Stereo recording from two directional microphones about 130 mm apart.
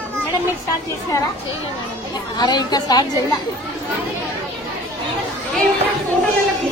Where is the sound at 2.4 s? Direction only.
30° left (ahead or behind).